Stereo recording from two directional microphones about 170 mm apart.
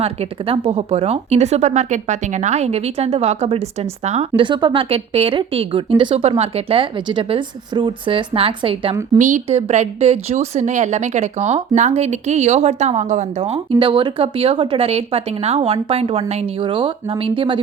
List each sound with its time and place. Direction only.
0.0 s speech: 35° right (ahead or behind)
4.4 s speech: 30° right (ahead or behind)
9.1 s speech: 45° right (ahead or behind); by 17.6 s 30° right (ahead or behind)